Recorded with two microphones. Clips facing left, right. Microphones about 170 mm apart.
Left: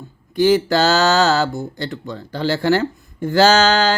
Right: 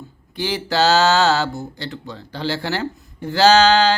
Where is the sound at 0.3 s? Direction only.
45° left (ahead or behind).